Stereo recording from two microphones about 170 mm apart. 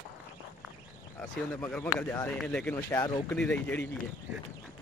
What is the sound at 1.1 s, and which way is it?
Speech, 5° left (ahead or behind).